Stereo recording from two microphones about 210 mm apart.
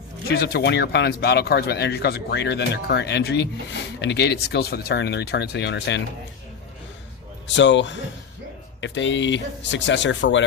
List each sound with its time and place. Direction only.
0.3 s speech: 50° left (ahead or behind)
7.4 s speech: 60° left (ahead or behind)